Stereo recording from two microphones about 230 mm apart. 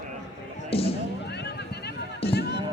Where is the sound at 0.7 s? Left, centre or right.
Left.